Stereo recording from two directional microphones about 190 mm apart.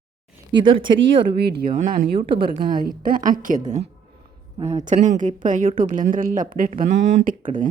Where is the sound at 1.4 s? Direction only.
60° right (ahead or behind).